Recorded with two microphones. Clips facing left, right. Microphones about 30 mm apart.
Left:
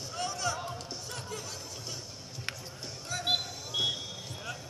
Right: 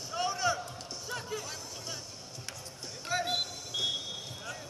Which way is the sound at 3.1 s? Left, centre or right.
Right.